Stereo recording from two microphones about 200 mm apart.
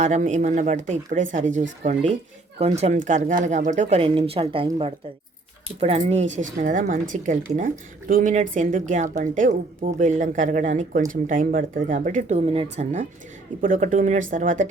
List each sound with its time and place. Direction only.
0.0 s speech: 35° right (ahead or behind)